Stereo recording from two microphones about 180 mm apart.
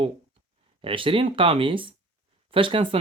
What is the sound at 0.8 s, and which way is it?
Speech, 30° right (ahead or behind).